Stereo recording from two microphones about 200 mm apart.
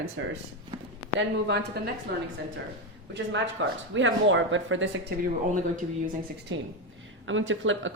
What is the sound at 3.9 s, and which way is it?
A woman's voice, 70° right (ahead or behind).